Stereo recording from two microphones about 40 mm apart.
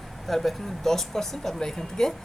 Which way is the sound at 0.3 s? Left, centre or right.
Centre.